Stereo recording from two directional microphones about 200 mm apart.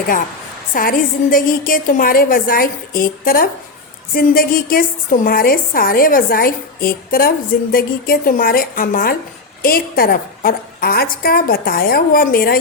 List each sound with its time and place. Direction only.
0.7 s a woman's voice: 45° left (ahead or behind)